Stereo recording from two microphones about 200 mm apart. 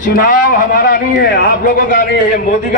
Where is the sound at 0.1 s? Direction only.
45° left (ahead or behind).